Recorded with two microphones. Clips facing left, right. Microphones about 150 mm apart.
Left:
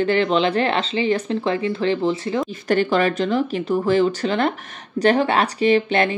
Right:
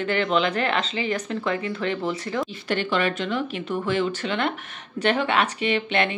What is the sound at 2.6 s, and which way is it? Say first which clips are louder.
Speech: left 7 dB; 40° left (ahead or behind).